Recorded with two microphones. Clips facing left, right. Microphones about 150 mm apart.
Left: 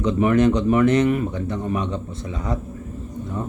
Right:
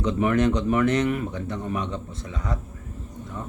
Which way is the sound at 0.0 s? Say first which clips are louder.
Left 4 dB; 20° left (ahead or behind).